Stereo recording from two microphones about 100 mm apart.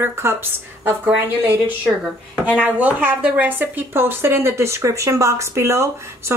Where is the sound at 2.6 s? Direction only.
15° right (ahead or behind).